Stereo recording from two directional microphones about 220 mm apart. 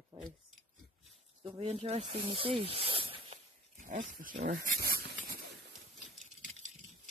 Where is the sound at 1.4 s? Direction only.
25° right (ahead or behind).